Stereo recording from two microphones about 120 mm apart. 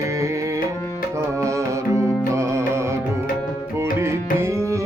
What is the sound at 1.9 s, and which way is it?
Music, 25° right (ahead or behind).